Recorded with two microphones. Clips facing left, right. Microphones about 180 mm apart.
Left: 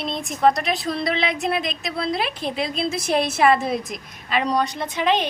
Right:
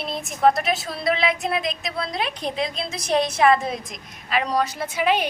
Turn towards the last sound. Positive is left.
turn(degrees=-10)  # may be behind; listen again after turning